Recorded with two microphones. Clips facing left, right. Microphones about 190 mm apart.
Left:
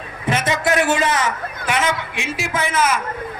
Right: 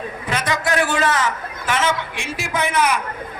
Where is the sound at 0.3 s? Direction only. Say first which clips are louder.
Left 3 dB; 25° left (ahead or behind).